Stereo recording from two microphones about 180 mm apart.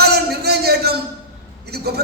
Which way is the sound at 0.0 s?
60° right (ahead or behind).